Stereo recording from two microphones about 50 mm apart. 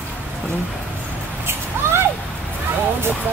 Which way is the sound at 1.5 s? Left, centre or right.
Right.